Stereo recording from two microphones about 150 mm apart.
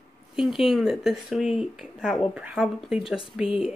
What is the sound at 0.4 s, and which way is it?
Speech, centre (ahead or behind).